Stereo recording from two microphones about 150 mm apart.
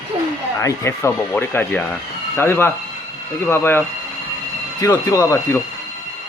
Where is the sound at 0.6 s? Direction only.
20° left (ahead or behind).